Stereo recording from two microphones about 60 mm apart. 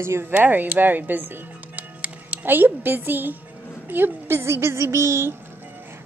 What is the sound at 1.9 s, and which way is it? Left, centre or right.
Music, right.